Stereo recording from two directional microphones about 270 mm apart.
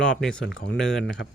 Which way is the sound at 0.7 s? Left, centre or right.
Centre.